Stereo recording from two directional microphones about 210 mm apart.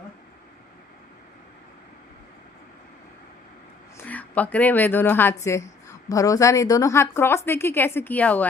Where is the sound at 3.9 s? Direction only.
5° left (ahead or behind).